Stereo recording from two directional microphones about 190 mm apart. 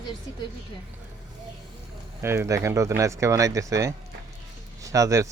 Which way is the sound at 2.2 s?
15° right (ahead or behind).